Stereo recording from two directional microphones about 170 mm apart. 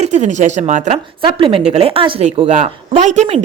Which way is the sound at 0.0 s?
40° right (ahead or behind).